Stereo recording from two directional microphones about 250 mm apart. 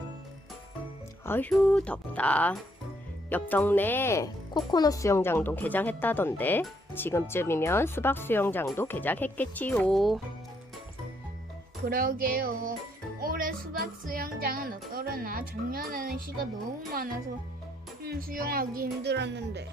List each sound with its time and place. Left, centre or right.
1.2 s speech: centre
11.9 s a woman's voice: right
13.1 s music: right
18.0 s a woman's voice: right